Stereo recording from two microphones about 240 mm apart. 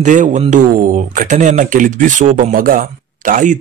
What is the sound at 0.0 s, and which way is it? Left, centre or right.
Speech, right.